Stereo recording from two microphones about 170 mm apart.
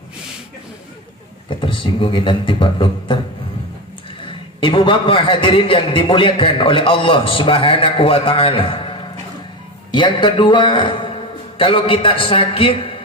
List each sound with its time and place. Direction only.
1.5 s a man's voice: 30° left (ahead or behind)
4.6 s a man's voice: 30° left (ahead or behind)